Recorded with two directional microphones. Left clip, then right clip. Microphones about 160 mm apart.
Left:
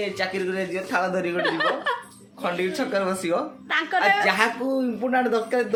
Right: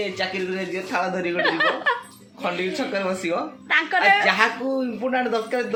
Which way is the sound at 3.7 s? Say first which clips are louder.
Right 3 dB; centre (ahead or behind).